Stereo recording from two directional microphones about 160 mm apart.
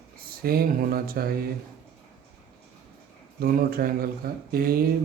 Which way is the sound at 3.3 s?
70° right (ahead or behind).